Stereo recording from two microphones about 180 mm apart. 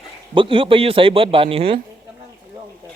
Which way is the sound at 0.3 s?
30° right (ahead or behind).